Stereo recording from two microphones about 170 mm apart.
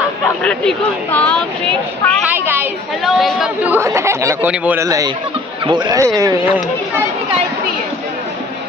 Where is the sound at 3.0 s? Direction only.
Centre (ahead or behind).